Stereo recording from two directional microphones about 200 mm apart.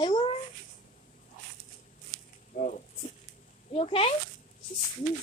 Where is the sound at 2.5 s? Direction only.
40° left (ahead or behind).